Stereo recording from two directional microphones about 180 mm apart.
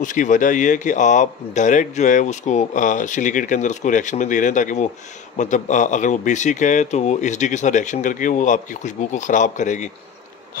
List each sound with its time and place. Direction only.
0.0 s speech: 45° left (ahead or behind)